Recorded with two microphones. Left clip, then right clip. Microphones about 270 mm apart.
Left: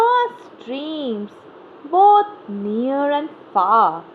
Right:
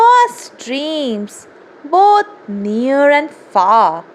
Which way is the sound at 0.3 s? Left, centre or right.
Right.